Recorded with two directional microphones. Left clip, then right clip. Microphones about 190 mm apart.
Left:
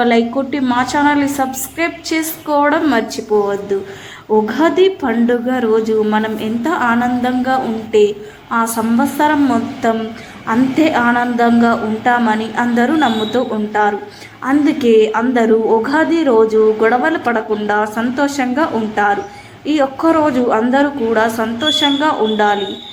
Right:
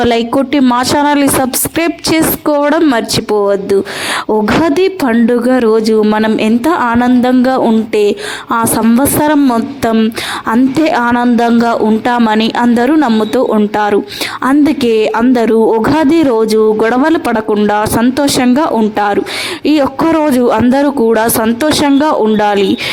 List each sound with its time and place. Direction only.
0.0 s a woman's voice: 55° right (ahead or behind)